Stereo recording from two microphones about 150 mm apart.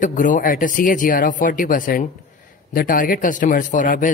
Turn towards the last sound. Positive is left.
turn(degrees=60)  # may be behind; listen again after turning